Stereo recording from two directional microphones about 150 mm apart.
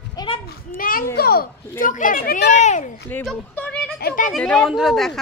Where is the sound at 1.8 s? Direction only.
65° left (ahead or behind).